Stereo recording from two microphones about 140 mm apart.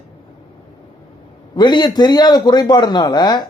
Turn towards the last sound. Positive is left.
turn(degrees=30)  # may be behind; listen again after turning